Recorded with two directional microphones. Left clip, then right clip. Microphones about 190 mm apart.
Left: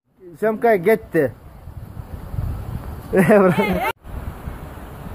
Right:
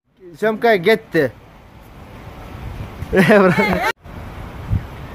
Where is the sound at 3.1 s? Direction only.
5° right (ahead or behind).